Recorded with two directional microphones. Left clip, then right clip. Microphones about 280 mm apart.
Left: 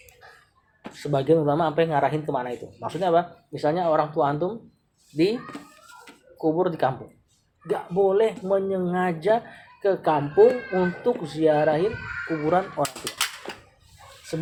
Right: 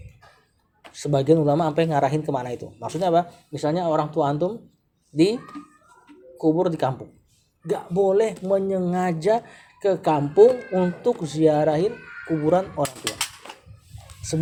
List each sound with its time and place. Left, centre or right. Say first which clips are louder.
0.9 s speech: right 2 dB; right
6.4 s speech: right 1 dB; right
12.4 s speech: right 2 dB; right